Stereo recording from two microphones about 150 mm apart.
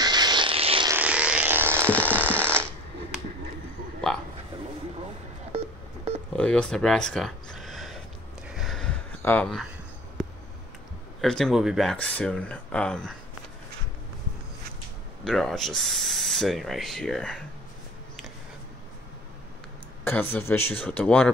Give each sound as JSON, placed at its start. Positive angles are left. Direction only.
{"t": 0.0, "sound": "vehicle", "side_deg": -30}
{"t": 0.8, "sound": "a sound", "side_deg": -10}
{"t": 6.3, "sound": "a sound", "side_deg": 5}
{"t": 9.2, "sound": "speech", "side_deg": 15}
{"t": 11.1, "sound": "speech", "side_deg": 5}
{"t": 15.2, "sound": "speech", "side_deg": 0}
{"t": 20.1, "sound": "speech", "side_deg": 15}